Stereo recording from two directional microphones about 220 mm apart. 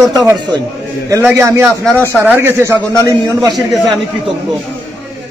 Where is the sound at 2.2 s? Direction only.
10° right (ahead or behind).